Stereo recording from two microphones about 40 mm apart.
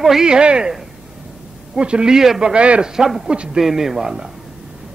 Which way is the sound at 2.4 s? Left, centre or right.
Right.